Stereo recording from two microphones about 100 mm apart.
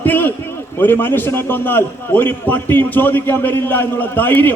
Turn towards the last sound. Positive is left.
turn(degrees=20)  # may be behind; listen again after turning